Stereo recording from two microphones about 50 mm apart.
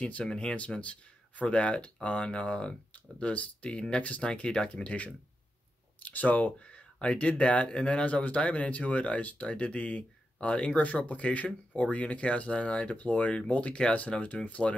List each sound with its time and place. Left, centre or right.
0.2 s speech: centre
4.3 s speech: centre